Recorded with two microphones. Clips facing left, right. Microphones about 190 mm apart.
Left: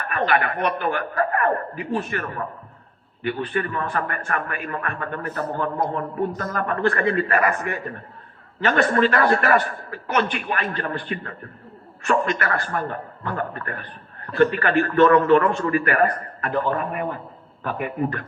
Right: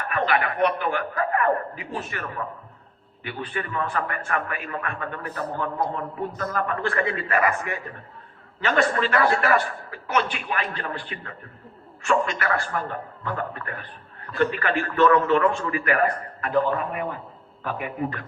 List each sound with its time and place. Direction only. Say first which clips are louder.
0.1 s a man's voice: left 2 dB; 50° left (ahead or behind)